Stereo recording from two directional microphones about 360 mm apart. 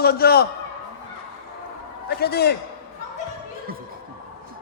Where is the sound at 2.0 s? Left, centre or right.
Left.